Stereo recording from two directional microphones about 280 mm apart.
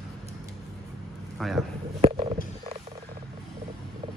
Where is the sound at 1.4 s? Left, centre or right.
Centre.